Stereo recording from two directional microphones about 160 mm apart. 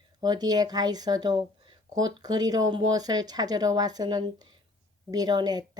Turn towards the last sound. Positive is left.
turn(degrees=-25)  # may be behind; listen again after turning